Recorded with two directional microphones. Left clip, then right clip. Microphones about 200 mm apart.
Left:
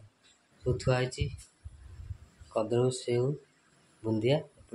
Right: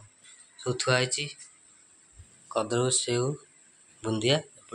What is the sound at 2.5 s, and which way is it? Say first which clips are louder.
Speech: right 2 dB; 10° left (ahead or behind).